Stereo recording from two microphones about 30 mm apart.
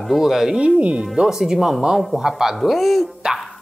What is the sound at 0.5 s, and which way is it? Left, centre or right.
Speech, right.